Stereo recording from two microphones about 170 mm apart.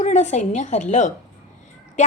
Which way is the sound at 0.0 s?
45° left (ahead or behind).